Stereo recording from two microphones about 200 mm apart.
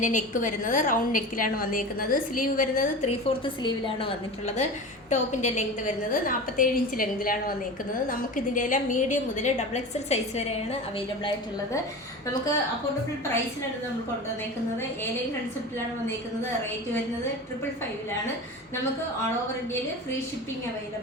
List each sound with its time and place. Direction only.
0.0 s a woman's voice: 40° left (ahead or behind)
3.1 s a woman's voice: 25° left (ahead or behind); by 7.5 s 45° left (ahead or behind)
8.5 s a woman's voice: 40° left (ahead or behind)